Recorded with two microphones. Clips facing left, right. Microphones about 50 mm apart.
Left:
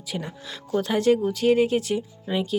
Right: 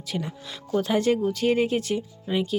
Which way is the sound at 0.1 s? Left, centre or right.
Centre.